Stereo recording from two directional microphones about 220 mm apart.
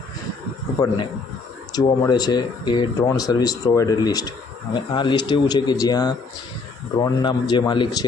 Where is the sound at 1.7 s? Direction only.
15° left (ahead or behind).